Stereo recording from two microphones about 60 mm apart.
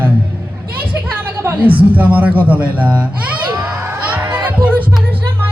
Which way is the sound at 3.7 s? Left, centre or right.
Right.